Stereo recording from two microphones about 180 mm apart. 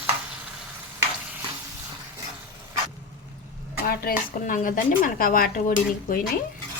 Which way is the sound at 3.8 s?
55° left (ahead or behind).